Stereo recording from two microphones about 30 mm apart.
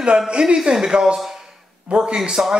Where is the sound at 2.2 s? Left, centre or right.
Centre.